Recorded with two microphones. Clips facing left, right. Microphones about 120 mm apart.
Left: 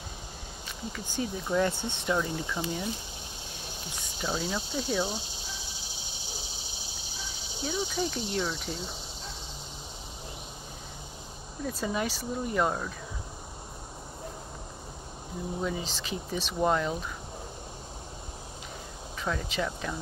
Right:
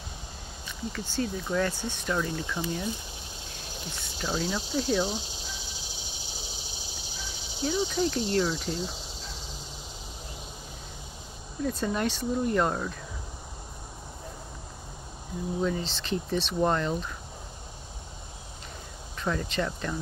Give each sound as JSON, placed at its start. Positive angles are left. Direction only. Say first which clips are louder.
{"t": 0.9, "sound": "speech", "louder": "right 2 dB", "side_deg": 15}
{"t": 1.7, "sound": "speech", "louder": "left 1 dB", "side_deg": 25}
{"t": 2.1, "sound": "speech", "louder": "even", "side_deg": 10}
{"t": 4.2, "sound": "speech", "louder": "right 1 dB", "side_deg": 5}
{"t": 7.6, "sound": "speech", "louder": "right 4 dB", "side_deg": 5}
{"t": 11.6, "sound": "speech", "louder": "right 3 dB", "side_deg": 5}
{"t": 15.6, "sound": "speech", "louder": "right 4 dB", "side_deg": 10}
{"t": 19.2, "sound": "speech", "louder": "right 2 dB", "side_deg": 0}